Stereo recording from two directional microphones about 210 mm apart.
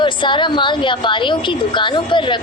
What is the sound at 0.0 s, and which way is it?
A woman's voice, 20° left (ahead or behind).